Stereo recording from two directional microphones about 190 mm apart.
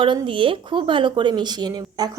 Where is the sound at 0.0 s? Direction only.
25° right (ahead or behind).